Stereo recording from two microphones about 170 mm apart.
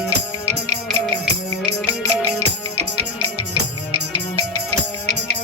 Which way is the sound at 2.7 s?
35° right (ahead or behind).